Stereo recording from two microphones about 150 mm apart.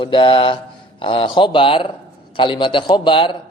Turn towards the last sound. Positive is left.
turn(degrees=35)  # may be behind; listen again after turning